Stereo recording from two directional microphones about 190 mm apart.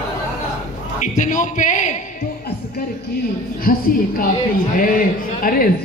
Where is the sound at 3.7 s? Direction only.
45° left (ahead or behind).